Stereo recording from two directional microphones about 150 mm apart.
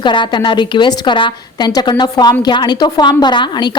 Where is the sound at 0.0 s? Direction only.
30° left (ahead or behind).